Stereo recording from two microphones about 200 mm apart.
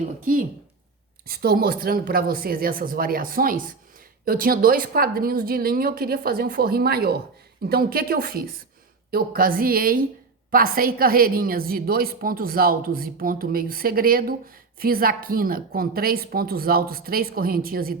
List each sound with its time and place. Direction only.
1.3 s a woman's voice: 50° right (ahead or behind)